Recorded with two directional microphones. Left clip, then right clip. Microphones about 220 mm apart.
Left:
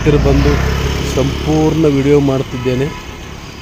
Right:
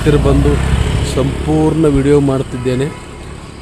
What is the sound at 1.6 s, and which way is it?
Speech, centre (ahead or behind).